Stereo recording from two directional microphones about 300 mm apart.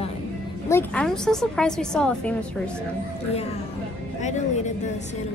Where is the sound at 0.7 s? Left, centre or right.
Centre.